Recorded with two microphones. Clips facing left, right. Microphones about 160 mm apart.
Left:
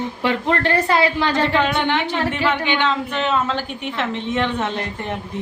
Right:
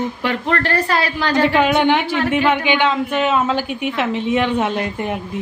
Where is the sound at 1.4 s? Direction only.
10° right (ahead or behind).